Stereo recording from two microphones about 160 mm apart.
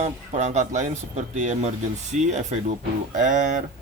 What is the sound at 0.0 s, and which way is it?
Speech, 45° right (ahead or behind).